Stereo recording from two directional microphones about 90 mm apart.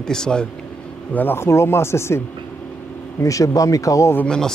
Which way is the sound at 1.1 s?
25° left (ahead or behind).